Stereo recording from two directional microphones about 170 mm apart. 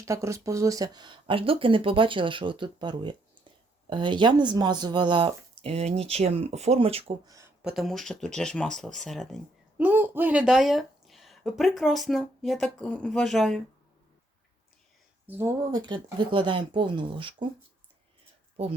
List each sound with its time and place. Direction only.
0.0 s speech: 20° right (ahead or behind); by 7.2 s 35° right (ahead or behind)
7.3 s a sound: 20° right (ahead or behind)
7.6 s speech: centre (ahead or behind)
9.8 s speech: 10° right (ahead or behind)
15.3 s speech: 15° right (ahead or behind)
15.9 s speech: 25° right (ahead or behind)
18.6 s speech: 35° right (ahead or behind)